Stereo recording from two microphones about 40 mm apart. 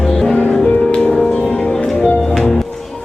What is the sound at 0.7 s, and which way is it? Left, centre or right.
Music, left.